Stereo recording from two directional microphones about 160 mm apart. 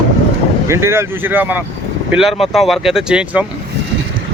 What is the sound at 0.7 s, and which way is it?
Speech, 15° right (ahead or behind).